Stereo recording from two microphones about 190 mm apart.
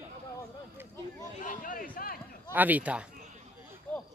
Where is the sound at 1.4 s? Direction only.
45° left (ahead or behind).